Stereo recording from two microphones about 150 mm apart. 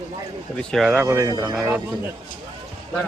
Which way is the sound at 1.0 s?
20° right (ahead or behind).